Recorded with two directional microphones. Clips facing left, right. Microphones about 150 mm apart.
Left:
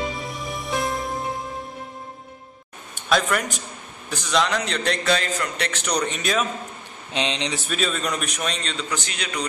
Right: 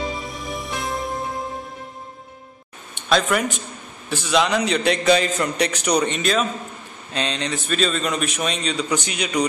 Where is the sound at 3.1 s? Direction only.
5° right (ahead or behind).